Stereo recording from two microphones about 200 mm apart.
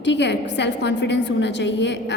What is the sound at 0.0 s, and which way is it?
A woman's voice, 60° left (ahead or behind).